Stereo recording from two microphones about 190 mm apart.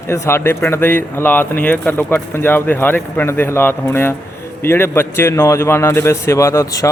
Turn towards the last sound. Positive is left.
turn(degrees=15)  # may be behind; listen again after turning